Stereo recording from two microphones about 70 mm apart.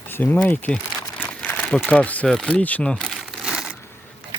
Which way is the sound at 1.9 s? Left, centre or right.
Centre.